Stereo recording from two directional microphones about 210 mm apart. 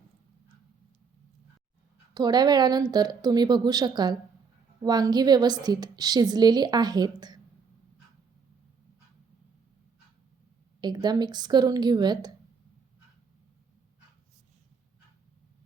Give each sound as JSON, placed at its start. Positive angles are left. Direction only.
{"t": 2.1, "sound": "a woman's voice", "side_deg": -20}
{"t": 10.8, "sound": "a woman's voice", "side_deg": -20}